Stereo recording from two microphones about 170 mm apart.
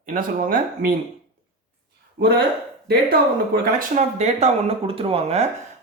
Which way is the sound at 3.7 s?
40° right (ahead or behind).